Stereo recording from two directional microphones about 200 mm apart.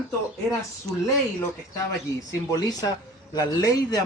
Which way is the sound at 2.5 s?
20° left (ahead or behind).